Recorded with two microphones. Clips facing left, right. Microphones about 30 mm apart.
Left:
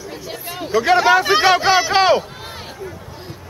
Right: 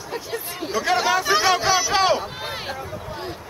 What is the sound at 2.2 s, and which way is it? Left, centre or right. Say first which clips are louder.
Run: right 3 dB; right.